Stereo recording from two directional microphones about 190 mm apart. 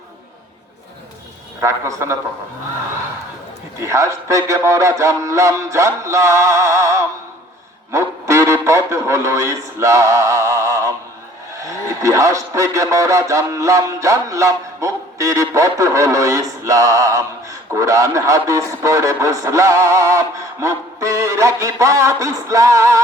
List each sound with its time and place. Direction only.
1.6 s a man's voice: 15° right (ahead or behind)
3.8 s a man's voice: 15° right (ahead or behind)